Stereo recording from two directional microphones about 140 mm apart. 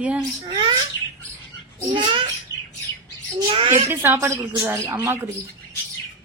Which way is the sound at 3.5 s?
40° right (ahead or behind).